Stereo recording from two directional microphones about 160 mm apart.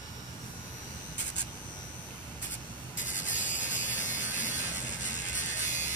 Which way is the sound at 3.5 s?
50° left (ahead or behind).